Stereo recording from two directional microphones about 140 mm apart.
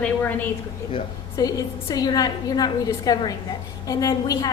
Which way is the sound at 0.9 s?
25° left (ahead or behind).